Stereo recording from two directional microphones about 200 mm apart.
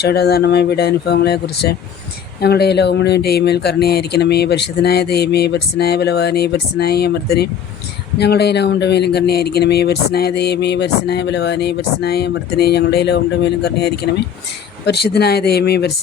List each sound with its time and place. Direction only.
0.0 s speech: 55° left (ahead or behind)